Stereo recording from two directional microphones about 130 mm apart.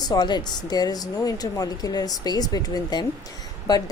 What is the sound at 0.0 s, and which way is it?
Speech, 30° left (ahead or behind).